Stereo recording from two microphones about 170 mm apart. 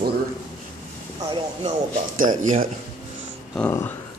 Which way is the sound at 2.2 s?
50° right (ahead or behind).